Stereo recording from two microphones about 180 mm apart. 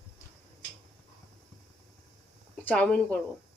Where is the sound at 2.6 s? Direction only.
5° left (ahead or behind).